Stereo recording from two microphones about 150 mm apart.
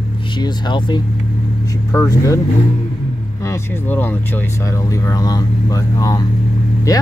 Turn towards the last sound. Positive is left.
turn(degrees=25)  # may be behind; listen again after turning